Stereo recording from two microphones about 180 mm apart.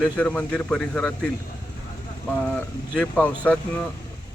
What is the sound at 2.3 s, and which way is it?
Speech, 10° left (ahead or behind).